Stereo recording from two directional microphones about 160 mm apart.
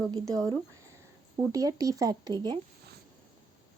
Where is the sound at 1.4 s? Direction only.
20° right (ahead or behind).